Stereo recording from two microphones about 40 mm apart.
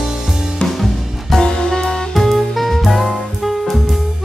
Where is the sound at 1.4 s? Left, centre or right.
Centre.